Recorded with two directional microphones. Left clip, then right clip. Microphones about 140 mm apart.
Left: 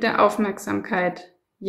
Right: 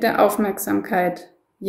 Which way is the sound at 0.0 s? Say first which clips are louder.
Right 2 dB; 20° left (ahead or behind).